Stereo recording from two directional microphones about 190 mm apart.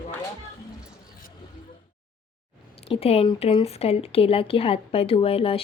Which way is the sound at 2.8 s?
30° left (ahead or behind).